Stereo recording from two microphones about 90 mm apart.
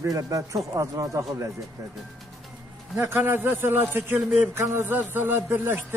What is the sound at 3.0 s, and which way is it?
A man's voice, 25° right (ahead or behind).